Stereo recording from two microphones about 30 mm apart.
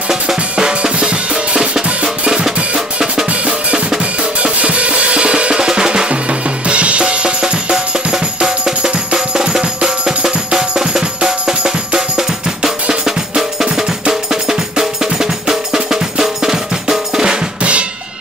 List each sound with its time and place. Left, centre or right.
0.6 s drum kit: right
0.9 s drum: right
4.0 s drum kit: right
5.7 s drum: right
6.0 s drum kit: right
7.7 s music: right
13.4 s music: centre
15.1 s percussion: centre
17.6 s drum kit: right